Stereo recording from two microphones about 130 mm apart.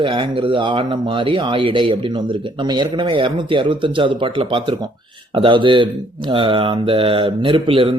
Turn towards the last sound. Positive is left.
turn(degrees=-45)  # may be behind; listen again after turning